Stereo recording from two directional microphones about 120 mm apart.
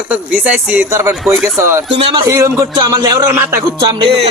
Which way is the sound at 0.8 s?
25° right (ahead or behind).